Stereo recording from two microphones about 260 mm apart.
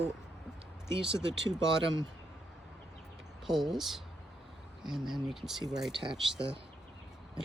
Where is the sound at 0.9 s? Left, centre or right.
Right.